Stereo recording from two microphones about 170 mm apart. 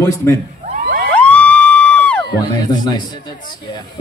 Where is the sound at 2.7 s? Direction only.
25° left (ahead or behind).